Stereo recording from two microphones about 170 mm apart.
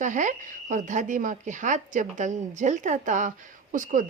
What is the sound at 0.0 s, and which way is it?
A woman's voice, 45° right (ahead or behind).